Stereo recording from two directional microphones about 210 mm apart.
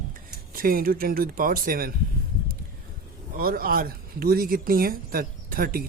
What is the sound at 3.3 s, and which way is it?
Speech, 45° right (ahead or behind).